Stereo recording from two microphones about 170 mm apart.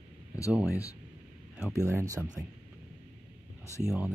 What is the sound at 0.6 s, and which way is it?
Speech, 20° left (ahead or behind).